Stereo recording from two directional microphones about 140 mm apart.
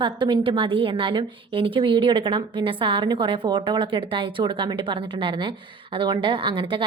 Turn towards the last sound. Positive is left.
turn(degrees=-35)  # may be behind; listen again after turning